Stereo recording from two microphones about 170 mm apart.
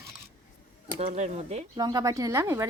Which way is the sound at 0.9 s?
40° right (ahead or behind).